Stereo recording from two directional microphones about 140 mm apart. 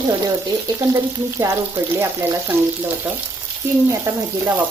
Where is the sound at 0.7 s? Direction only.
25° right (ahead or behind).